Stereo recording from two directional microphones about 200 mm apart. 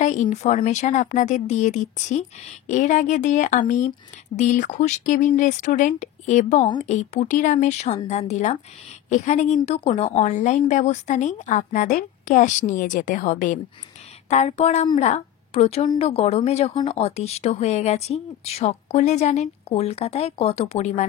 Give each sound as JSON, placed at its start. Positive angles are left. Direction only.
{"t": 0.0, "sound": "a woman's voice", "side_deg": 40}